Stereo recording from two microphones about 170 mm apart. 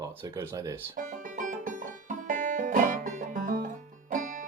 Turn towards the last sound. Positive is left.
turn(degrees=-50)  # may be behind; listen again after turning